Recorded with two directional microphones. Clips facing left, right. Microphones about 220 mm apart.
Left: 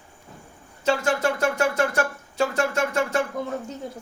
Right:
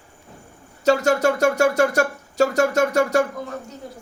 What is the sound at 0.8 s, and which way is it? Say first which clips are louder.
Speech: right 5 dB; 40° right (ahead or behind).